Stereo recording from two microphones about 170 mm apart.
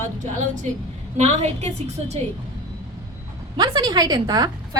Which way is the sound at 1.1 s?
40° right (ahead or behind).